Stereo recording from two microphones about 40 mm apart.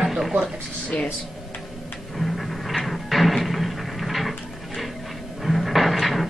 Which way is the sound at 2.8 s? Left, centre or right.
Centre.